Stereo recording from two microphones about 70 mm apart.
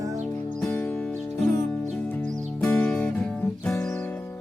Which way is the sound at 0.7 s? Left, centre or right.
Left.